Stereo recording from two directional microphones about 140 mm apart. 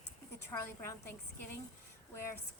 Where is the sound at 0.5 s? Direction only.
20° left (ahead or behind).